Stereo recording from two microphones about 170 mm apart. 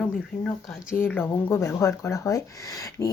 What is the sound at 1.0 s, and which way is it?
Speech, 10° left (ahead or behind).